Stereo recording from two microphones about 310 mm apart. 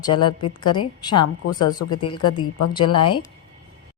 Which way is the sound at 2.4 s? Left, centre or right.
Left.